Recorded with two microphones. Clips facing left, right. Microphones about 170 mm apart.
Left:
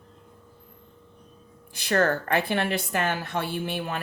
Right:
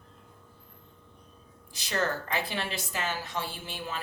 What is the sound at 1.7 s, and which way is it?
A woman's voice, 55° left (ahead or behind).